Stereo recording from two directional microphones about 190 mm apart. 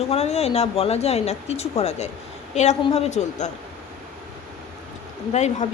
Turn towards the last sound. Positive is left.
turn(degrees=35)  # may be behind; listen again after turning